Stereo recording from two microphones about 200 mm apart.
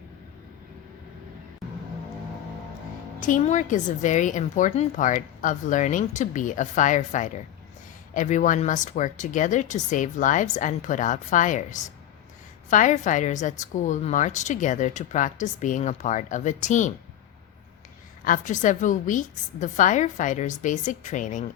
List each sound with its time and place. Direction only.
3.2 s a woman's voice: 40° left (ahead or behind)
18.3 s a woman's voice: 40° left (ahead or behind)